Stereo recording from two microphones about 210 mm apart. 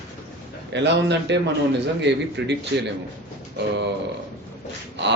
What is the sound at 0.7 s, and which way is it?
Speech, 55° right (ahead or behind).